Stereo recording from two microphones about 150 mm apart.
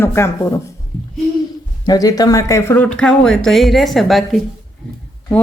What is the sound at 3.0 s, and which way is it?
Speech, 5° left (ahead or behind).